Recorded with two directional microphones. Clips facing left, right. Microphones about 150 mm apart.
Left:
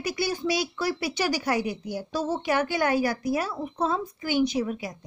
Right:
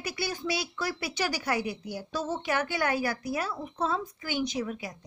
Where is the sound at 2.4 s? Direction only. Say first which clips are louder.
Left 4 dB; 15° left (ahead or behind).